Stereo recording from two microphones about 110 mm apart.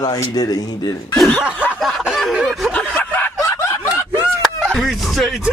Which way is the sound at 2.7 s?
15° left (ahead or behind).